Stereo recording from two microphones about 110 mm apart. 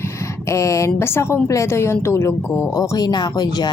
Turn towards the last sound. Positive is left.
turn(degrees=40)  # may be behind; listen again after turning